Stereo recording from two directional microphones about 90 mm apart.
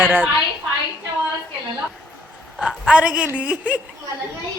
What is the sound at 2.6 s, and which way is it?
A woman's voice, 10° right (ahead or behind).